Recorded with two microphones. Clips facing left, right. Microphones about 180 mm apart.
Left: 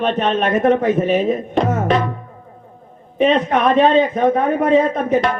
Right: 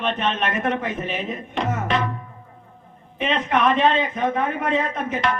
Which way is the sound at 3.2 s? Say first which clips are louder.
Left 6 dB; 40° left (ahead or behind).